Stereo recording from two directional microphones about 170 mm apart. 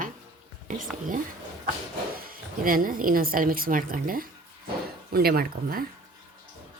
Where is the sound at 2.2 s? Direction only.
55° right (ahead or behind).